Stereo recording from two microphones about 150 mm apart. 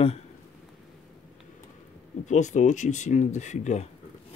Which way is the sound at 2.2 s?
55° left (ahead or behind).